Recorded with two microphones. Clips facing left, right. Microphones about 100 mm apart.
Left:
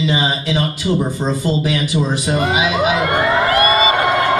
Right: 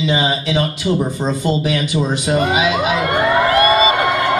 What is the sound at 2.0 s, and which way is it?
Speech, 20° right (ahead or behind).